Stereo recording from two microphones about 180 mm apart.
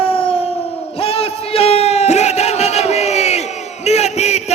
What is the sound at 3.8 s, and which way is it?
Battle cry, 35° left (ahead or behind).